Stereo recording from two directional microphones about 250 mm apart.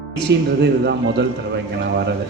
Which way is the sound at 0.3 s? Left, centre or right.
Right.